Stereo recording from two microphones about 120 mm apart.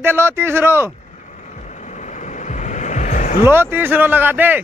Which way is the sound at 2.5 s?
90° left.